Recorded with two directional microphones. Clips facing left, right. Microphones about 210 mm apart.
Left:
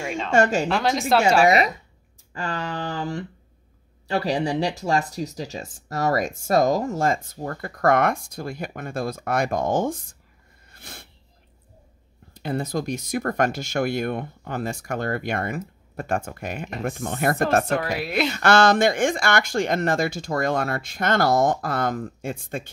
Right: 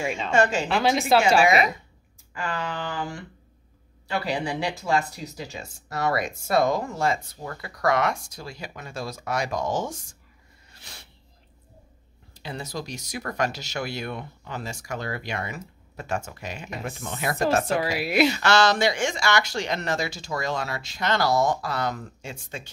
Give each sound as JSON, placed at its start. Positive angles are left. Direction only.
{"t": 0.3, "sound": "speech", "side_deg": 45}
{"t": 0.7, "sound": "speech", "side_deg": 0}
{"t": 2.3, "sound": "speech", "side_deg": 40}
{"t": 10.7, "sound": "a sound", "side_deg": 55}
{"t": 12.4, "sound": "speech", "side_deg": 55}
{"t": 17.9, "sound": "speech", "side_deg": -5}
{"t": 18.3, "sound": "speech", "side_deg": 55}